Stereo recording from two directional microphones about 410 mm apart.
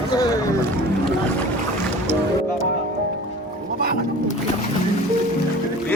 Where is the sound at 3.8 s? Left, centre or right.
Right.